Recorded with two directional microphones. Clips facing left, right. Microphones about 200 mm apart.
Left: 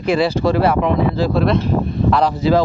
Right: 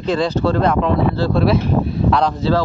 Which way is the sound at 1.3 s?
5° right (ahead or behind).